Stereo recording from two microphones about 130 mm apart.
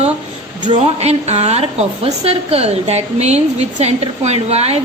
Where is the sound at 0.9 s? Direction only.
55° right (ahead or behind).